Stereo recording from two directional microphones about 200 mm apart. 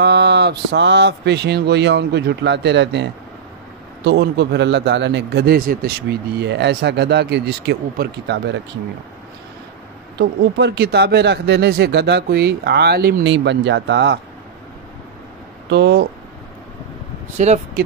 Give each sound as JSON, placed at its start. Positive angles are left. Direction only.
{"t": 0.0, "sound": "a man's voice", "side_deg": -55}
{"t": 10.1, "sound": "a man's voice", "side_deg": -55}
{"t": 15.7, "sound": "a man's voice", "side_deg": -55}
{"t": 17.4, "sound": "speech", "side_deg": -35}